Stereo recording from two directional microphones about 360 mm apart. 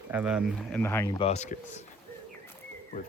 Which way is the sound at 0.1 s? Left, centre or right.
Centre.